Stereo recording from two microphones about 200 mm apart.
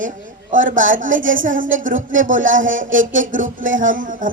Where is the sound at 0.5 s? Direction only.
40° right (ahead or behind).